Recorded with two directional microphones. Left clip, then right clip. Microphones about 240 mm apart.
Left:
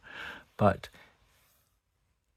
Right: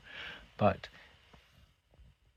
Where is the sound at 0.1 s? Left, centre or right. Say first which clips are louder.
Left 3 dB; left.